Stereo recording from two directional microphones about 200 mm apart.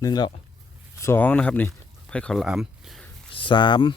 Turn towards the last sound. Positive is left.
turn(degrees=25)  # may be behind; listen again after turning